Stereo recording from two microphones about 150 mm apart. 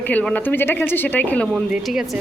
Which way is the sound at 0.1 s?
10° left (ahead or behind).